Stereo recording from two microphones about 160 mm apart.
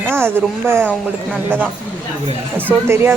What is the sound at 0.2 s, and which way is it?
Speech, 15° right (ahead or behind).